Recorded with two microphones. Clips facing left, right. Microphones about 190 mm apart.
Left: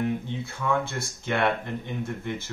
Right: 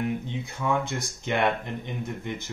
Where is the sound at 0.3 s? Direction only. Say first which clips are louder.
Even; 15° right (ahead or behind).